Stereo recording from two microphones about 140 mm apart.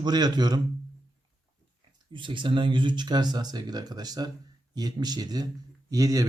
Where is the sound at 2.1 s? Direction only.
35° right (ahead or behind).